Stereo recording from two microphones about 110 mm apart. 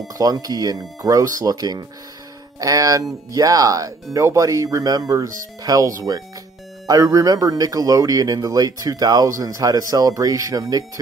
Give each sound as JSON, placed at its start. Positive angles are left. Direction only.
{"t": 0.1, "sound": "a man's voice", "side_deg": -35}